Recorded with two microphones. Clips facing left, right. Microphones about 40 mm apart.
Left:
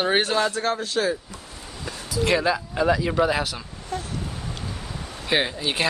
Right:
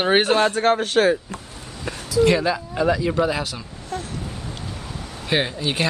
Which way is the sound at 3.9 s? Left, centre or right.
Centre.